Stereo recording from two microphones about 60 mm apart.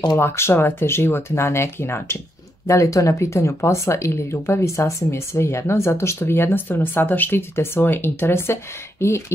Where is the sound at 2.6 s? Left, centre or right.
Left.